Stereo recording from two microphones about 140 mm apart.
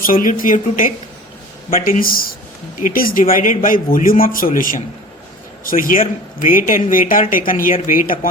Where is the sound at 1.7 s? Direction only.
85° left.